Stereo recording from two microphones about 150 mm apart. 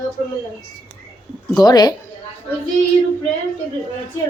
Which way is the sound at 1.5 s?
25° left (ahead or behind).